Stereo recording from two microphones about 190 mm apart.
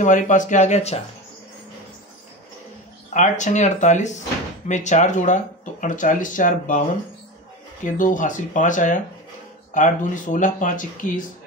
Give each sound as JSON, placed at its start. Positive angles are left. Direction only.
{"t": 0.0, "sound": "speech", "side_deg": 40}
{"t": 3.1, "sound": "speech", "side_deg": 40}
{"t": 7.8, "sound": "speech", "side_deg": 45}